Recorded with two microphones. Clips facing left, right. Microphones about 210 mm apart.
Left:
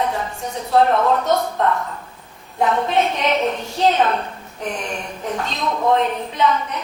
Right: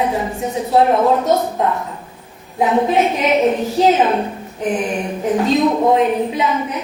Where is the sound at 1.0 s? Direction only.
15° right (ahead or behind).